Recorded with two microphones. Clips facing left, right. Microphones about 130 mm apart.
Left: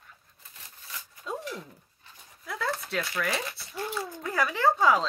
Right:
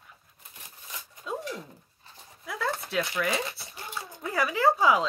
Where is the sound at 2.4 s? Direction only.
Centre (ahead or behind).